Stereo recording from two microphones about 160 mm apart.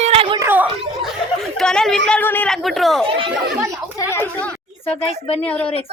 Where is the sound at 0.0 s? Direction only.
35° right (ahead or behind).